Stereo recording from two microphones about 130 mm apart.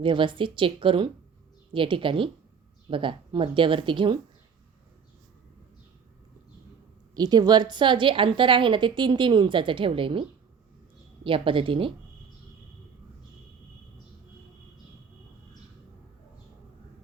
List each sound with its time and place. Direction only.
0.0 s a woman's voice: 40° right (ahead or behind)
7.1 s a woman's voice: 30° right (ahead or behind)